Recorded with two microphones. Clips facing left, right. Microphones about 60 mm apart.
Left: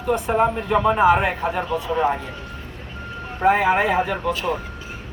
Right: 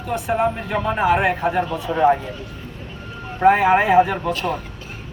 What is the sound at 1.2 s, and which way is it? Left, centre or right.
Speech, centre.